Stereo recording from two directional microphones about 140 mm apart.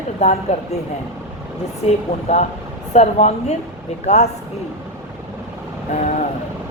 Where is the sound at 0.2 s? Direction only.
50° left (ahead or behind).